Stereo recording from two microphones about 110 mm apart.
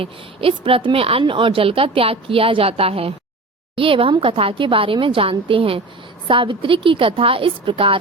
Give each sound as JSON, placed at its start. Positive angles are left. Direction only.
{"t": 0.0, "sound": "speech", "side_deg": -55}